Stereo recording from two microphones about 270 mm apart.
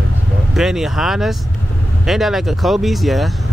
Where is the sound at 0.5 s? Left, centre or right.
Centre.